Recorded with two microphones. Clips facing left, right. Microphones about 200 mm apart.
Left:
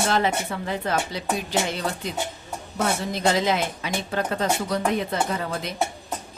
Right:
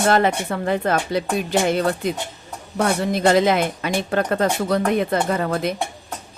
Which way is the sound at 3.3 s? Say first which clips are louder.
Right 6 dB; 55° right (ahead or behind).